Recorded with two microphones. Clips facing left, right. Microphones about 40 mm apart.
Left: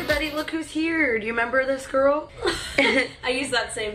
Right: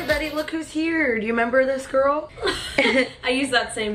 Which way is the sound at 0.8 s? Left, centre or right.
Centre.